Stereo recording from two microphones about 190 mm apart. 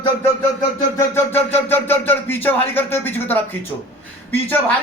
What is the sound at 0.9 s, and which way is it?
Speech, 10° left (ahead or behind).